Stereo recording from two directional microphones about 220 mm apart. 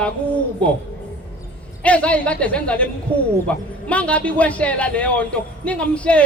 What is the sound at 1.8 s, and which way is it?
Speech, 5° left (ahead or behind).